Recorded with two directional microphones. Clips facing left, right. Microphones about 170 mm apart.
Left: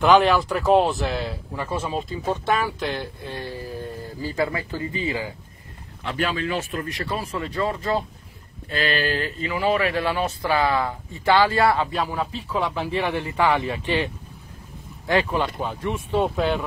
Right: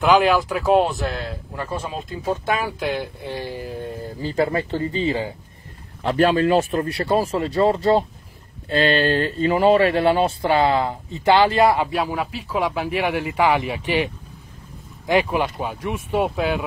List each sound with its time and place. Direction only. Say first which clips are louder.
0.0 s speech: even; centre (ahead or behind)
3.0 s speech: right 3 dB; 15° right (ahead or behind)
4.6 s speech: right 6 dB; 30° right (ahead or behind); by 16.6 s 5° right (ahead or behind)